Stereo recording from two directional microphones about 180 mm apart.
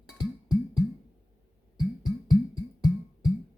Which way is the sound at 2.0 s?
20° left (ahead or behind).